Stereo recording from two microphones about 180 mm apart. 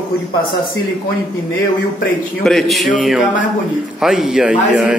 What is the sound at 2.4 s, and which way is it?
A man's voice, centre (ahead or behind).